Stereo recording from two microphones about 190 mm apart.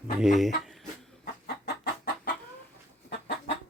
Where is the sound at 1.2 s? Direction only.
55° left (ahead or behind).